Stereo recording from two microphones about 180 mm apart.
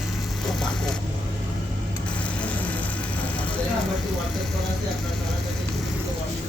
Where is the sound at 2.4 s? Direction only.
10° left (ahead or behind).